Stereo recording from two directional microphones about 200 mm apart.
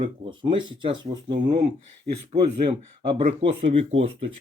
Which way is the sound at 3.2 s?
35° right (ahead or behind).